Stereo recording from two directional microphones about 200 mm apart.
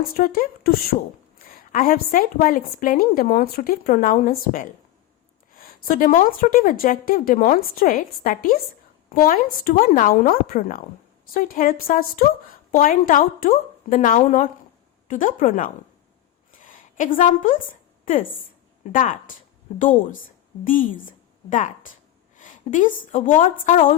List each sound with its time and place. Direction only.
0.1 s a woman's voice: 45° left (ahead or behind)
16.5 s a sound: 40° left (ahead or behind)
18.9 s a woman's voice: 40° left (ahead or behind)
20.7 s a woman's voice: 45° left (ahead or behind)
22.4 s a woman's voice: 40° left (ahead or behind)